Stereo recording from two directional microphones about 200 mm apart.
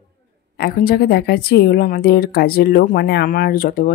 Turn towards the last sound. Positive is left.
turn(degrees=45)  # may be behind; listen again after turning